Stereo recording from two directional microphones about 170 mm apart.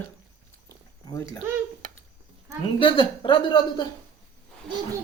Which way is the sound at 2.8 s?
30° left (ahead or behind).